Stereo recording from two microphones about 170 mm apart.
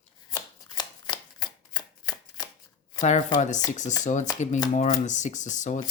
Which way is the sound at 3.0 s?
45° left (ahead or behind).